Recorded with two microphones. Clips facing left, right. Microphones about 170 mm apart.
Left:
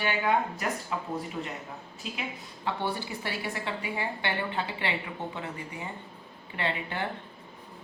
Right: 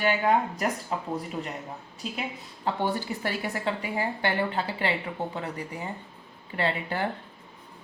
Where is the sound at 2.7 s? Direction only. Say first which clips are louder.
Right 4 dB; 40° right (ahead or behind).